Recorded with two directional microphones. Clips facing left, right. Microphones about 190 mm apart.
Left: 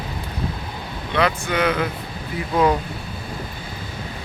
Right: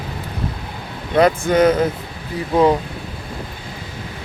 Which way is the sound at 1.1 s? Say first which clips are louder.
Right 7 dB; 45° right (ahead or behind).